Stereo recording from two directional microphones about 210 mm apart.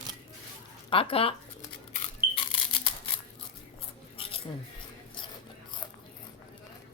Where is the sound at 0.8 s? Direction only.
25° left (ahead or behind).